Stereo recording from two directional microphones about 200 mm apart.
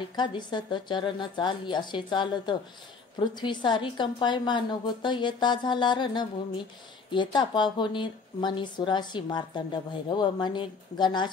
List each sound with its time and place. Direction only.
0.1 s a woman's voice: 20° left (ahead or behind)